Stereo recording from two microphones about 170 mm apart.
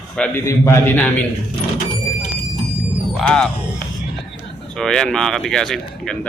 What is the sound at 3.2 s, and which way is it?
Speech, 5° left (ahead or behind).